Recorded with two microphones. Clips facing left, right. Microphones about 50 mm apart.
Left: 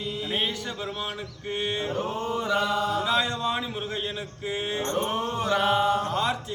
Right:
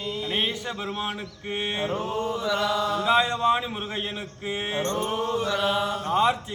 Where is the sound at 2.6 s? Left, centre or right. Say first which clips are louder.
Right 1 dB; right.